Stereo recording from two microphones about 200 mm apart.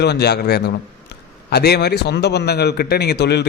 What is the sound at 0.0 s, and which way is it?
A man's voice, 55° left (ahead or behind).